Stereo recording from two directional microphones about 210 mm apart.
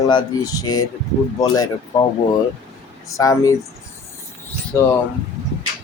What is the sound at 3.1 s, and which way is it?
Speech, 15° left (ahead or behind).